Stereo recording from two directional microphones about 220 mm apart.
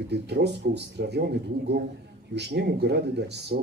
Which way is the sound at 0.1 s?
50° right (ahead or behind).